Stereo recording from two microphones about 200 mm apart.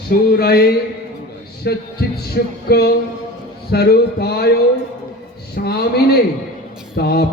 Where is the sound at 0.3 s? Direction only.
50° left (ahead or behind).